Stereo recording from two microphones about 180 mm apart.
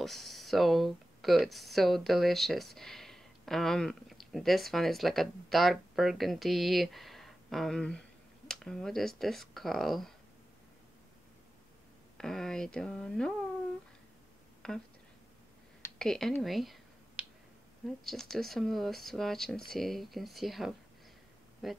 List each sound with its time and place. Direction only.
0.0 s speech: centre (ahead or behind)
12.2 s speech: centre (ahead or behind)
14.6 s speech: 5° left (ahead or behind)
16.0 s speech: centre (ahead or behind)
17.2 s finger snapping: 10° right (ahead or behind)
18.0 s speech: centre (ahead or behind)